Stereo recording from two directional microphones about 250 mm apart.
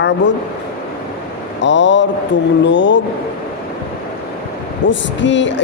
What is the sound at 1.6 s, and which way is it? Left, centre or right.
Speech, left.